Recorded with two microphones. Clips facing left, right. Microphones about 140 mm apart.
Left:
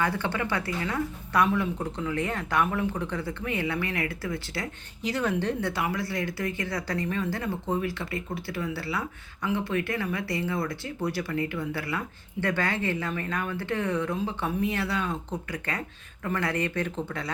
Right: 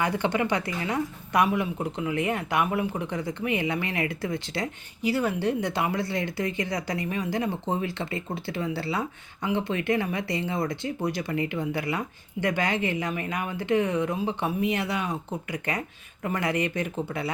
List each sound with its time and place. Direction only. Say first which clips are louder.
0.0 s speech: right 3 dB; 15° right (ahead or behind)
5.0 s speech: right 2 dB; 5° right (ahead or behind)